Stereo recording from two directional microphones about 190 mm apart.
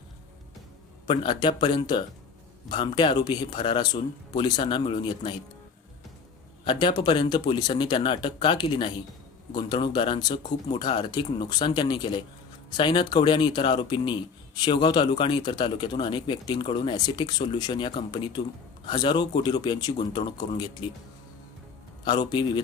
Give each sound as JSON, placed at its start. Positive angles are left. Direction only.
{"t": 1.0, "sound": "a man's voice", "side_deg": 25}
{"t": 6.7, "sound": "a man's voice", "side_deg": 25}
{"t": 22.0, "sound": "a man's voice", "side_deg": 25}